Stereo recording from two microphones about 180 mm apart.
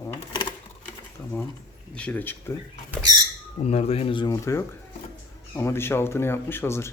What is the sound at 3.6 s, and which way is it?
Speech, 35° left (ahead or behind).